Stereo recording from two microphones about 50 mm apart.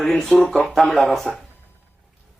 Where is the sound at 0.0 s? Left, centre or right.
Centre.